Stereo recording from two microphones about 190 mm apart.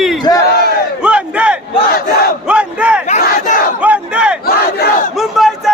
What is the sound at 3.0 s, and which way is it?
Crowd, 40° left (ahead or behind).